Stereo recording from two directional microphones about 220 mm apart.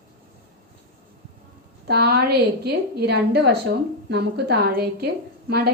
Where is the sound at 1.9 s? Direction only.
45° right (ahead or behind).